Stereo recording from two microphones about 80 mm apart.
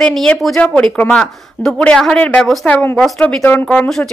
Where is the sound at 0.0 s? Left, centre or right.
Centre.